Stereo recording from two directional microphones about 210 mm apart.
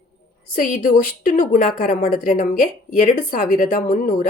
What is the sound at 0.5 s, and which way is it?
A woman's voice, 40° left (ahead or behind).